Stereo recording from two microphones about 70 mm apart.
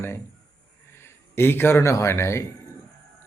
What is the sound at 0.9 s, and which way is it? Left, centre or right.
A man's voice, left.